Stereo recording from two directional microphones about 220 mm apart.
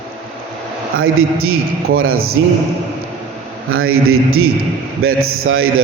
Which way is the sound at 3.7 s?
70° right (ahead or behind).